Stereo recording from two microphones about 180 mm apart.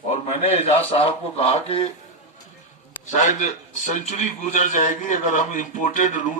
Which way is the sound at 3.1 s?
40° left (ahead or behind).